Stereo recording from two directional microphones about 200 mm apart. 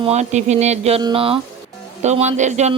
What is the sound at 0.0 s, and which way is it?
Speech, 35° right (ahead or behind).